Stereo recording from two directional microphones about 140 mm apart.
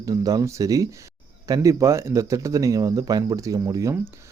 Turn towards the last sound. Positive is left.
turn(degrees=-25)  # may be behind; listen again after turning